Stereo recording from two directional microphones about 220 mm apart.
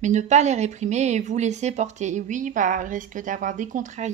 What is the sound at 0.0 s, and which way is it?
Speech, 30° right (ahead or behind).